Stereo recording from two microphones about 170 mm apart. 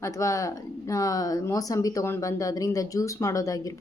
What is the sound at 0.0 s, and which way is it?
Speech, 20° left (ahead or behind).